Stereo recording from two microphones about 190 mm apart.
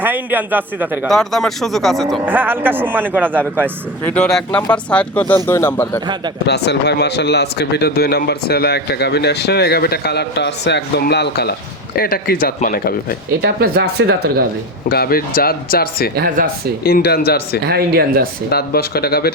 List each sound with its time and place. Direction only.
0.0 s a man's voice: 10° right (ahead or behind)
1.0 s speech: centre (ahead or behind)
2.2 s a man's voice: 10° right (ahead or behind)
4.0 s speech: 5° left (ahead or behind)
6.4 s a man's voice: 60° left (ahead or behind)
13.6 s speech: 55° right (ahead or behind)
14.8 s speech: 55° left (ahead or behind)
16.1 s speech: 50° right (ahead or behind)
16.8 s a man's voice: 55° left (ahead or behind)
17.6 s speech: 55° right (ahead or behind)
18.5 s a man's voice: 55° left (ahead or behind)